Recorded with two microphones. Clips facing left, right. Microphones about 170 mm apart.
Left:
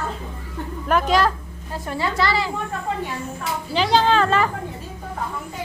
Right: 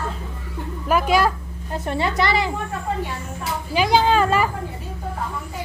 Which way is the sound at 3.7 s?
10° right (ahead or behind).